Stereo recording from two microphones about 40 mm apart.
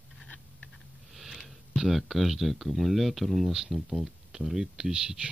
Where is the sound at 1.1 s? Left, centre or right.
Centre.